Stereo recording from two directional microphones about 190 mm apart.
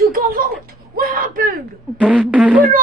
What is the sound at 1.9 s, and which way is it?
Speech, 5° right (ahead or behind).